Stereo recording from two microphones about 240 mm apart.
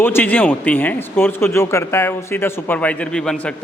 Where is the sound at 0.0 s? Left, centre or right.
Centre.